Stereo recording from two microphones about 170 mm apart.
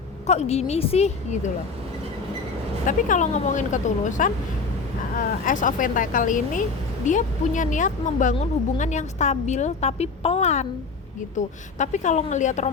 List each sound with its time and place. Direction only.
0.3 s a woman's voice: 40° left (ahead or behind)
2.8 s speech: 45° left (ahead or behind)